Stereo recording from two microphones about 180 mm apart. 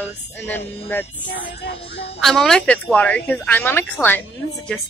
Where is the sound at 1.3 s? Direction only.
65° left (ahead or behind).